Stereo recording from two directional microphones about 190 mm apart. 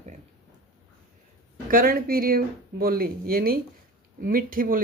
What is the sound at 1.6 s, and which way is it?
Speech, 50° right (ahead or behind).